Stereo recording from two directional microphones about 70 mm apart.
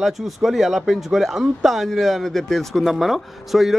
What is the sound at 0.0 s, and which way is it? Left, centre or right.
Speech, centre.